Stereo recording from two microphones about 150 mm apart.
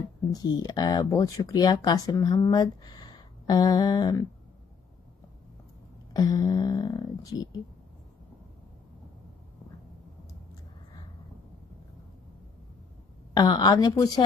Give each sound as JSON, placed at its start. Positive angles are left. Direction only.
{"t": 0.3, "sound": "speech", "side_deg": 25}
{"t": 6.1, "sound": "speech", "side_deg": 25}
{"t": 13.3, "sound": "speech", "side_deg": 30}